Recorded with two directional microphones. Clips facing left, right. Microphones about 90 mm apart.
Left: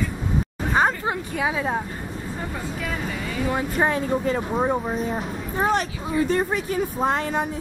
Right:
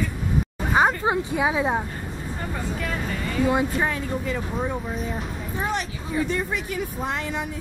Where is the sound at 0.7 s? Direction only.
15° right (ahead or behind).